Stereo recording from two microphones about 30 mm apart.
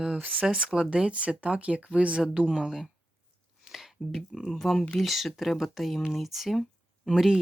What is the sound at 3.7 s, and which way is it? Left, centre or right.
Speech, centre.